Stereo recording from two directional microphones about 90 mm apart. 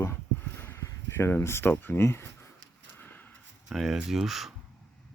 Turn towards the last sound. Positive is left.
turn(degrees=0)  # may be behind; listen again after turning